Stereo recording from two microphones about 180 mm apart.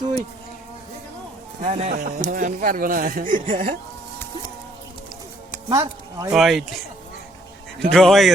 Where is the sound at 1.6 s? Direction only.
40° right (ahead or behind).